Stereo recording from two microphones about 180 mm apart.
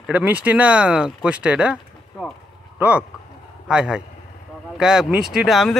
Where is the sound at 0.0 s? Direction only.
10° right (ahead or behind).